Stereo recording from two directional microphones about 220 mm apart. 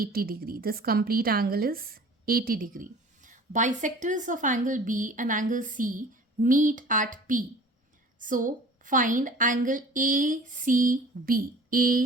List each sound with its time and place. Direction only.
0.0 s a woman's voice: 40° right (ahead or behind)